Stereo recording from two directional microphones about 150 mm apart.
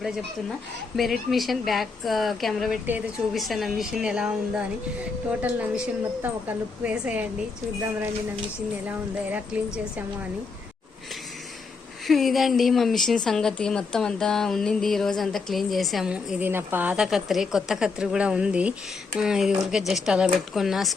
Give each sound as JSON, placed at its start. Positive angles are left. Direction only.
{"t": 0.9, "sound": "a woman's voice", "side_deg": 0}
{"t": 12.0, "sound": "speech", "side_deg": 0}